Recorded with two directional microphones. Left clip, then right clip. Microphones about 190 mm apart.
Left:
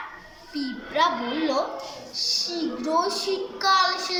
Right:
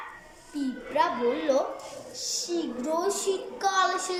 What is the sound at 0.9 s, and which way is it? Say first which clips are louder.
A child's voice: left 2 dB; 10° right (ahead or behind).